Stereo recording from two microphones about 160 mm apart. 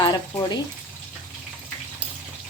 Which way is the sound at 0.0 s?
25° left (ahead or behind).